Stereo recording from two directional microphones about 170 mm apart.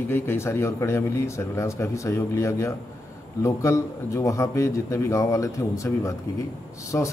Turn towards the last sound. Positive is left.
turn(degrees=15)  # may be behind; listen again after turning